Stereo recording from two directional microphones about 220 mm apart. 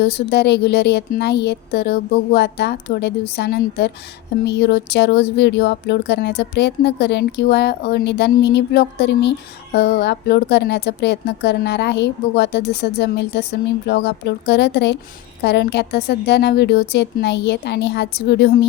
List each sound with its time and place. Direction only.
0.0 s a woman's voice: 50° left (ahead or behind)